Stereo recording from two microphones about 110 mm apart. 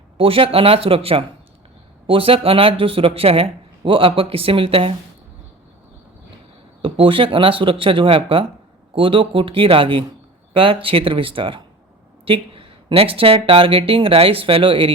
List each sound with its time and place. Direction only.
0.2 s speech: 55° right (ahead or behind)
6.8 s speech: 55° right (ahead or behind)